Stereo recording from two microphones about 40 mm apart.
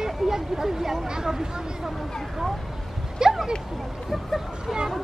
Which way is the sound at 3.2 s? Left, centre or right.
Centre.